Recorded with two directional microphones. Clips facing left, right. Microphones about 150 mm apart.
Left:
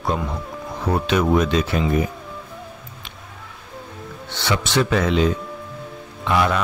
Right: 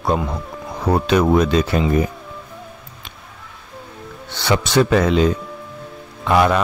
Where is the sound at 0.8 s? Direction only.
40° right (ahead or behind).